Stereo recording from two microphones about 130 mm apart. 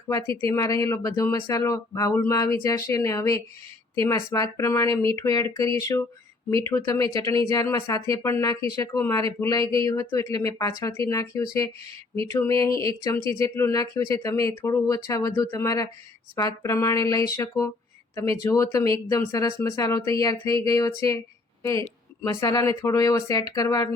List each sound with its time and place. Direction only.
0.4 s a woman's voice: 25° left (ahead or behind)